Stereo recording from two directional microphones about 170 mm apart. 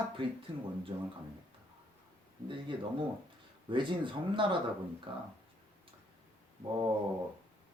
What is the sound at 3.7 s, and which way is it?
Speech, 30° right (ahead or behind).